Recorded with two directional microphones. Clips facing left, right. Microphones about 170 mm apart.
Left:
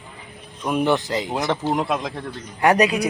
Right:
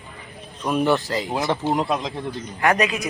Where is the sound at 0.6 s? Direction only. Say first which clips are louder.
Even; 15° left (ahead or behind).